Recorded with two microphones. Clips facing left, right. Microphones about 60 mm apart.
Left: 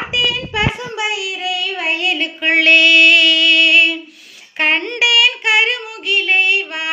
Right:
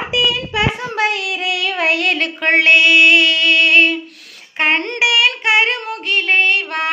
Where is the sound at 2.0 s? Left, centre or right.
Right.